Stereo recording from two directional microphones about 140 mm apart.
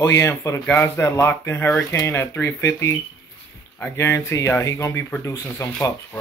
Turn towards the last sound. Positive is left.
turn(degrees=20)  # may be behind; listen again after turning